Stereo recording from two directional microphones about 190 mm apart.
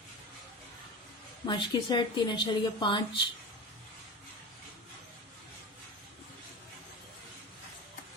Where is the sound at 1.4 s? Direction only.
25° left (ahead or behind).